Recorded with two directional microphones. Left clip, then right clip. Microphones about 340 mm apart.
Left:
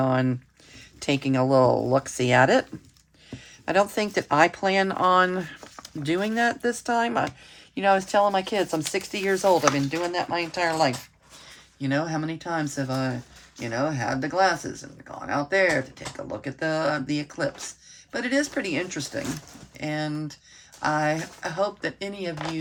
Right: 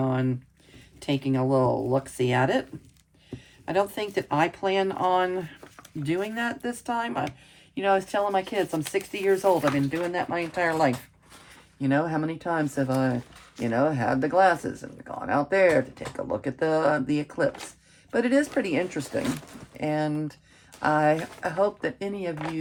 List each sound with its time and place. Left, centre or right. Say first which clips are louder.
0.0 s speech: left 4 dB; centre